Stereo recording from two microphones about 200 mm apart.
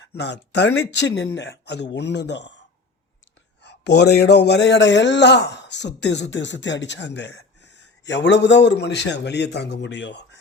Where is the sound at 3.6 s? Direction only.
60° left (ahead or behind).